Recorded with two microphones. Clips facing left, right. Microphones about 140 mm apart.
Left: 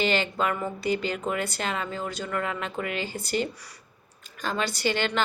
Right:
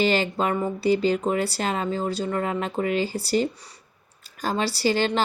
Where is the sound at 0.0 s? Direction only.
35° right (ahead or behind).